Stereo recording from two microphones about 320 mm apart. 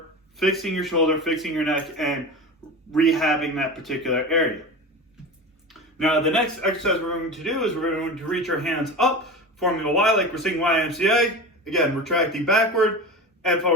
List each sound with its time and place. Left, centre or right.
0.3 s a man's voice: centre
6.0 s a man's voice: centre